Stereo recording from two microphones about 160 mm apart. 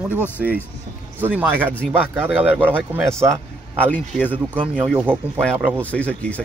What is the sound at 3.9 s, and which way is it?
Speech, 10° left (ahead or behind).